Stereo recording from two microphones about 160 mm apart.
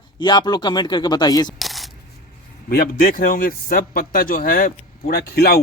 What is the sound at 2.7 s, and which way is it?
A man's voice, 65° left (ahead or behind).